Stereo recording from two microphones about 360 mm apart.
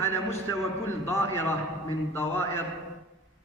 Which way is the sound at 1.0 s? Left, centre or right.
Centre.